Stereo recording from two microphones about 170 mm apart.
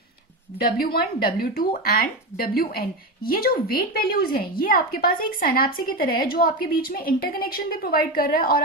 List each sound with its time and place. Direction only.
0.6 s a woman's voice: 60° left (ahead or behind)